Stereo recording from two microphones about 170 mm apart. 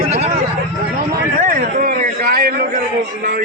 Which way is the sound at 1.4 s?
60° right (ahead or behind).